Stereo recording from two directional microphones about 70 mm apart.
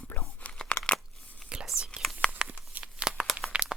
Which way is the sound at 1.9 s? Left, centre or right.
Centre.